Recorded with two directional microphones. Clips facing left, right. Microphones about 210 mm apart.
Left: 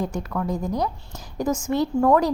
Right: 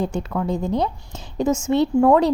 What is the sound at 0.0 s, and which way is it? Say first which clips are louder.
A woman's voice: right 3 dB; 25° right (ahead or behind).